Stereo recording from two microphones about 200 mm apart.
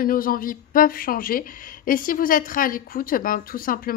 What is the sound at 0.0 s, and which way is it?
A woman's voice, 45° left (ahead or behind).